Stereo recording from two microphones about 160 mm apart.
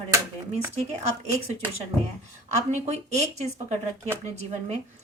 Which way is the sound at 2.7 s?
45° right (ahead or behind).